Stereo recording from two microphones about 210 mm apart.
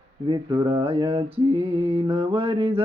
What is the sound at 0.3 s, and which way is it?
Mantra, 20° right (ahead or behind).